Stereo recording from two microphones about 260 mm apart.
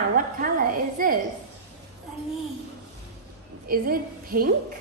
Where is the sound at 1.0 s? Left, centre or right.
Right.